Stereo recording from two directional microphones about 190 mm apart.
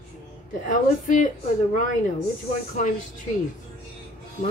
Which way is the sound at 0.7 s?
45° left (ahead or behind).